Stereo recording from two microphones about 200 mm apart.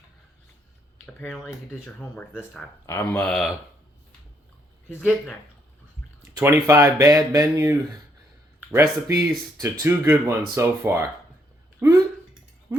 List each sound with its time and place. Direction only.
1.0 s speech: 10° left (ahead or behind)
6.3 s speech: 15° right (ahead or behind)
11.8 s dishes: 15° right (ahead or behind)